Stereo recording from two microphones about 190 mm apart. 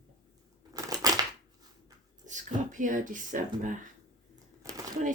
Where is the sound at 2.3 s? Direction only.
40° right (ahead or behind).